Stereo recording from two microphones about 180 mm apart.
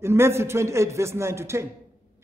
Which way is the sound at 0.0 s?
15° right (ahead or behind).